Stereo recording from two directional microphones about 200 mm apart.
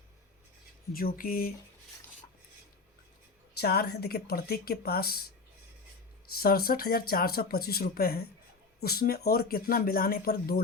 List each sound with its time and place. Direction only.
0.9 s speech: 45° left (ahead or behind)
3.6 s speech: 50° left (ahead or behind)
6.2 s speech: 50° left (ahead or behind)